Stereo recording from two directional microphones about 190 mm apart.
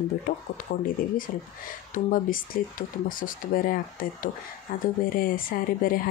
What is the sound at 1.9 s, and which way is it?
Speech, 45° left (ahead or behind).